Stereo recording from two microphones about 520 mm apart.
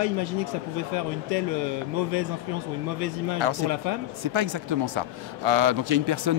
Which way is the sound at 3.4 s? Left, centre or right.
Right.